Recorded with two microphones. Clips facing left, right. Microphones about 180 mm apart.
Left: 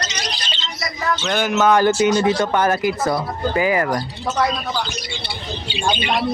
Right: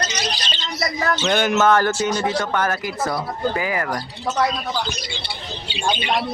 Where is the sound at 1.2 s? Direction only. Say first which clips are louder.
Right 2 dB; centre (ahead or behind).